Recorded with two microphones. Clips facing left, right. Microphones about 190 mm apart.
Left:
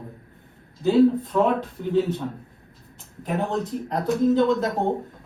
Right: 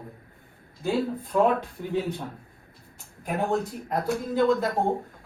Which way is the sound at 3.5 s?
5° right (ahead or behind).